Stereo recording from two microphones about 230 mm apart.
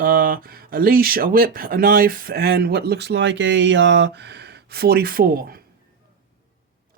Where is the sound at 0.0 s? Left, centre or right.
Right.